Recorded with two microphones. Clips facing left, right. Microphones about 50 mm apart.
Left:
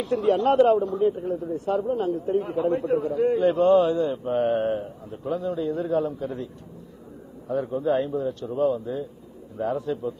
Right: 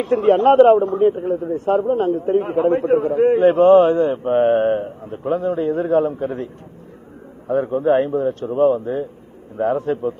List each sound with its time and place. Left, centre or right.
0.0 s a man's voice: right